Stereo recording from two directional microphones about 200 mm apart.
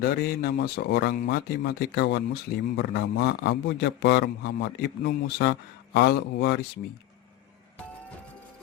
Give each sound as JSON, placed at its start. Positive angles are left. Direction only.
{"t": 0.0, "sound": "speech", "side_deg": 50}